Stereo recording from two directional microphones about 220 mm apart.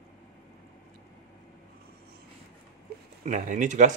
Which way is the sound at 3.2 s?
35° right (ahead or behind).